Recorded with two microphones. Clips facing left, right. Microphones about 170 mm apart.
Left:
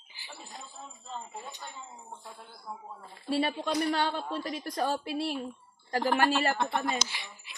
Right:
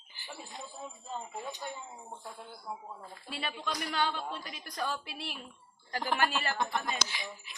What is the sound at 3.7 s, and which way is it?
A woman's voice, 30° left (ahead or behind).